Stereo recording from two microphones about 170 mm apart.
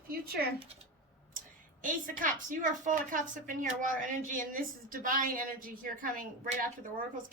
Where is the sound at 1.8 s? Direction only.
50° right (ahead or behind).